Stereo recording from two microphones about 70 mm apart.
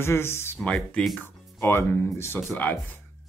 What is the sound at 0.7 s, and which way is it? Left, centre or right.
Speech, centre.